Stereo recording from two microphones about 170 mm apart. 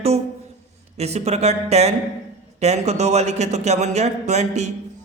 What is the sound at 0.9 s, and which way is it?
Speech, 40° right (ahead or behind).